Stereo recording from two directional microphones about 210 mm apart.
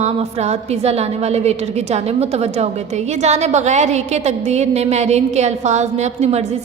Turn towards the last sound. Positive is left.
turn(degrees=-30)  # may be behind; listen again after turning